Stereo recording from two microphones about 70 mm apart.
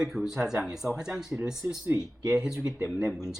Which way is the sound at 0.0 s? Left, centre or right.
Centre.